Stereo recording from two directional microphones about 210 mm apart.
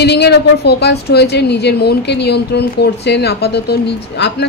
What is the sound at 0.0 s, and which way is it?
A woman's voice, 50° left (ahead or behind).